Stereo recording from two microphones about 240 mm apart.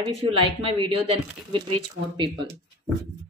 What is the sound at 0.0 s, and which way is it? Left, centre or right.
A woman's voice, right.